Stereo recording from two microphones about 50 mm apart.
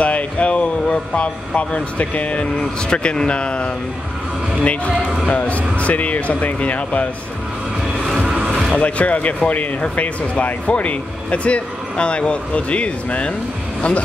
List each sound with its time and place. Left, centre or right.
0.0 s speech: left
5.3 s speech: left
8.7 s speech: left